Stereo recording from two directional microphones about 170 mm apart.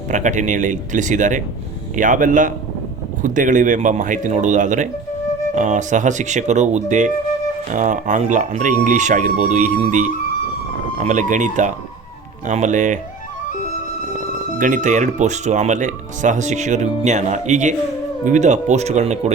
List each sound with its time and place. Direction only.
0.1 s speech: 45° right (ahead or behind)
14.6 s speech: 45° right (ahead or behind)